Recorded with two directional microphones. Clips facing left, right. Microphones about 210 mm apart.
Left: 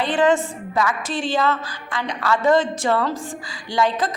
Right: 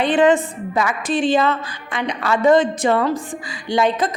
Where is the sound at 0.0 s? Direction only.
20° right (ahead or behind).